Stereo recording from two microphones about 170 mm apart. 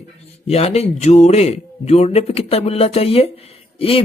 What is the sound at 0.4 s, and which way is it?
Speech, 35° left (ahead or behind).